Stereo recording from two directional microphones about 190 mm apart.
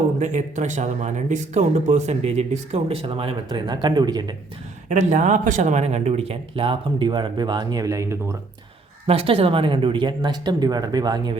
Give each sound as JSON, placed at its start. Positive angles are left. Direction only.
{"t": 0.2, "sound": "speech", "side_deg": -40}
{"t": 4.9, "sound": "speech", "side_deg": -40}
{"t": 9.0, "sound": "speech", "side_deg": -30}